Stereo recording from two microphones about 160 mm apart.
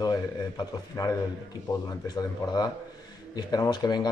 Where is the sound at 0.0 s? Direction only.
25° left (ahead or behind).